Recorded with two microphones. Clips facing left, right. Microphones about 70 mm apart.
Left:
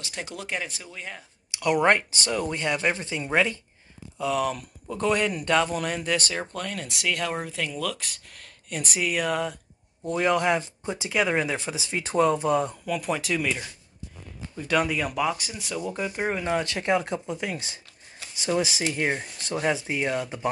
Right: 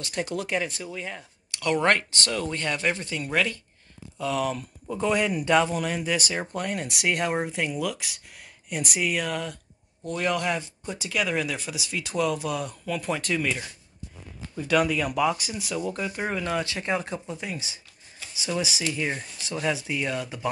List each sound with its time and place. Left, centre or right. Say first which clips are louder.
0.0 s speech: right 5 dB; centre
0.4 s speech: right 4 dB; centre
1.5 s speech: left 2 dB; centre
4.2 s speech: left 1 dB; centre
6.5 s speech: right 3 dB; right
7.7 s speech: right 1 dB; centre
10.0 s speech: left 4 dB; centre
12.8 s speech: left 1 dB; centre
16.8 s speech: left 3 dB; left
17.4 s speech: left 3 dB; left
18.4 s speech: left 3 dB; left